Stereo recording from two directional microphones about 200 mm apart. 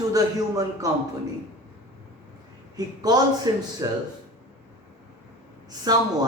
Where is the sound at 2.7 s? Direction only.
20° right (ahead or behind).